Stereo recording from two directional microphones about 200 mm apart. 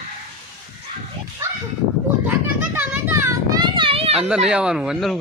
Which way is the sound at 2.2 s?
10° right (ahead or behind).